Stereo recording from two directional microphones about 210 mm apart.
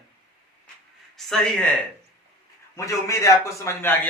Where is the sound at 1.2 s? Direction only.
Centre (ahead or behind).